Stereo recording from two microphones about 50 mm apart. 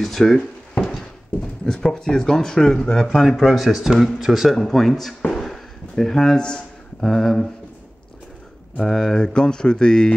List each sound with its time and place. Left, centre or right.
0.0 s drawer open or close: centre
0.8 s a sound: centre
2.8 s speech: centre
3.1 s speech: centre
5.3 s a sound: centre
8.8 s speech: centre